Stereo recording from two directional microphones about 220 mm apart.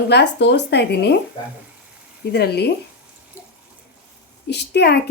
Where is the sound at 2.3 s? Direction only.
45° left (ahead or behind).